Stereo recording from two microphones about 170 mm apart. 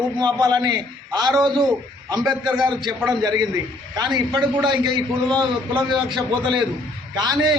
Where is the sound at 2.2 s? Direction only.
5° right (ahead or behind).